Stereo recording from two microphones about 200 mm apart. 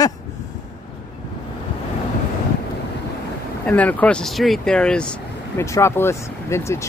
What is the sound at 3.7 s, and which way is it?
Speech, 5° left (ahead or behind).